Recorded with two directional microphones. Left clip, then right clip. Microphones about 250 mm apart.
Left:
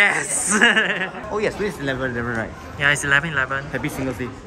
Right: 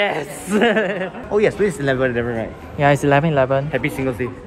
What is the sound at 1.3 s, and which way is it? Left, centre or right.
Speech, right.